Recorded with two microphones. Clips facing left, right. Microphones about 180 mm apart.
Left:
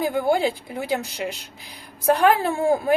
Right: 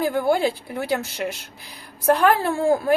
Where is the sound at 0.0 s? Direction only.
15° left (ahead or behind).